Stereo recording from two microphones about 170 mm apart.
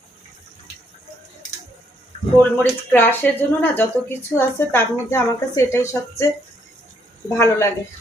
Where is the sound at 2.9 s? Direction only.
10° left (ahead or behind).